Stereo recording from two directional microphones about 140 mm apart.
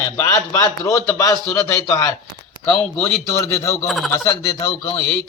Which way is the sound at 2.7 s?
5° left (ahead or behind).